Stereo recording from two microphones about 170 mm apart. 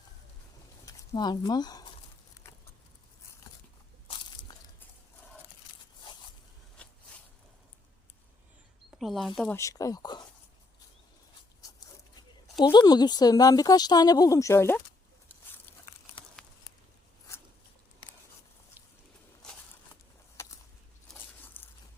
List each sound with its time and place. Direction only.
0.9 s speech: 25° left (ahead or behind)
4.1 s crunch: 30° left (ahead or behind)
6.0 s zipper: 30° left (ahead or behind)
9.0 s speech: centre (ahead or behind)
9.6 s speech: 20° left (ahead or behind)
12.6 s speech: 25° left (ahead or behind)
16.1 s patter: 5° left (ahead or behind)
19.9 s a sound: 15° left (ahead or behind)